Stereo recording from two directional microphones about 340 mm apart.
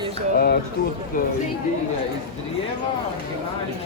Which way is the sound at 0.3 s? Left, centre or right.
Left.